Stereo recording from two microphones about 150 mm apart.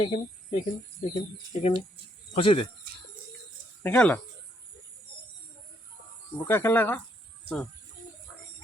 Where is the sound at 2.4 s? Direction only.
35° left (ahead or behind).